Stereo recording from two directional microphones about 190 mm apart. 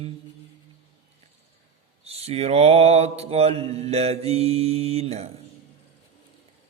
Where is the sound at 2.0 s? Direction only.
30° right (ahead or behind).